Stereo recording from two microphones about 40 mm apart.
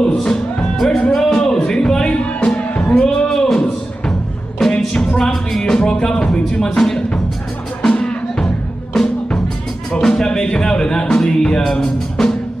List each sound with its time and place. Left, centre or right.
0.0 s music: centre
1.1 s a sound: centre
2.0 s music: left
3.5 s a sound: left
4.6 s music: centre
4.9 s music: centre
9.0 s music: centre
12.2 s music: centre